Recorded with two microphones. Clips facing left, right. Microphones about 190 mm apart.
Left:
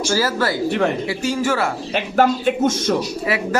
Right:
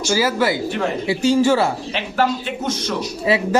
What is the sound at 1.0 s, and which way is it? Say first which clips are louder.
Speech: right 5 dB; 25° right (ahead or behind).